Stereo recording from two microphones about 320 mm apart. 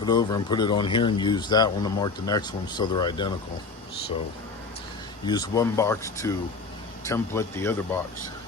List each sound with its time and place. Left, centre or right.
0.0 s speech: centre
5.2 s speech: centre